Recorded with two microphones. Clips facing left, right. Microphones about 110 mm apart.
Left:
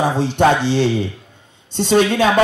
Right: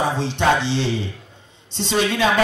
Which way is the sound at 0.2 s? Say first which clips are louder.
Left 4 dB; 50° left (ahead or behind).